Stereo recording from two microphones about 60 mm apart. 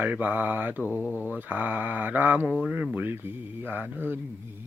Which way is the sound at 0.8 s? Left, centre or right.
Left.